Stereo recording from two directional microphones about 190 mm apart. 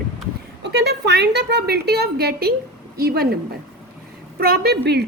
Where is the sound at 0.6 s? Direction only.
60° right (ahead or behind).